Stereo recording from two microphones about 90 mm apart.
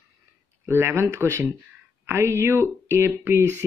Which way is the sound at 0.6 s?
25° right (ahead or behind).